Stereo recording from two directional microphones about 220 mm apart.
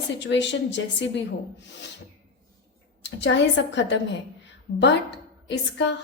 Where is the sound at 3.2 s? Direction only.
55° left (ahead or behind).